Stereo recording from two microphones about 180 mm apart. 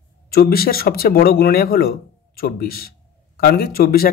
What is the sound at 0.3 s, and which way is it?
Speech, 55° left (ahead or behind).